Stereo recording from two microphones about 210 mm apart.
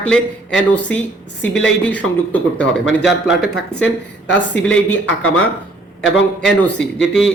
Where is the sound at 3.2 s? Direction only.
50° left (ahead or behind).